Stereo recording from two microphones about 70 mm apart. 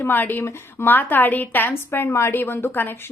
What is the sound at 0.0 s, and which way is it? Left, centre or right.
Speech, left.